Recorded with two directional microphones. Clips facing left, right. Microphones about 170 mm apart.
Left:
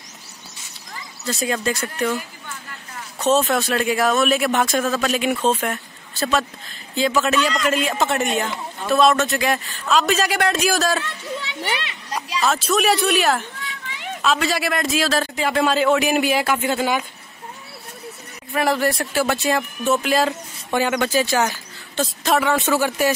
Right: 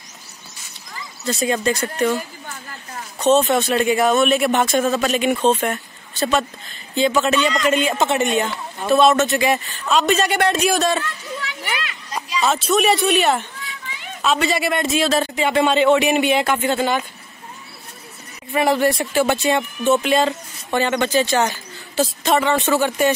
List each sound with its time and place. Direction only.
1.4 s speech: centre (ahead or behind)
3.2 s speech: centre (ahead or behind)
11.3 s a sound: 25° left (ahead or behind)
12.4 s speech: centre (ahead or behind)
18.5 s speech: centre (ahead or behind)